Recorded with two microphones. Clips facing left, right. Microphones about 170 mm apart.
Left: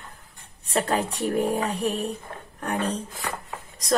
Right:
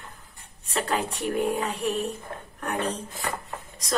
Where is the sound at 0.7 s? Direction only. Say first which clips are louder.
Left 3 dB; 35° left (ahead or behind).